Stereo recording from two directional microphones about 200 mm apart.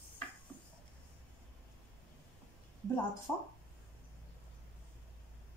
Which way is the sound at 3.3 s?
10° left (ahead or behind).